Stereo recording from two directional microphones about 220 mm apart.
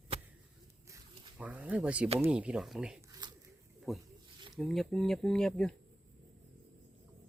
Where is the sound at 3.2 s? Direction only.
20° right (ahead or behind).